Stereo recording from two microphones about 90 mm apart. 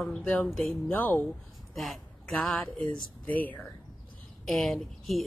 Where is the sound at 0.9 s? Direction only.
20° left (ahead or behind).